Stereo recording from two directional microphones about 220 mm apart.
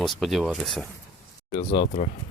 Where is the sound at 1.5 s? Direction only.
20° left (ahead or behind).